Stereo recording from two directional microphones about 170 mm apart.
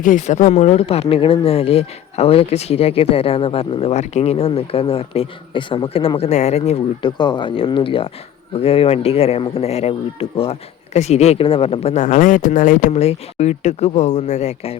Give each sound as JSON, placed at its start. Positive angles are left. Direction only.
{"t": 0.0, "sound": "speech", "side_deg": 45}
{"t": 7.0, "sound": "speech", "side_deg": 25}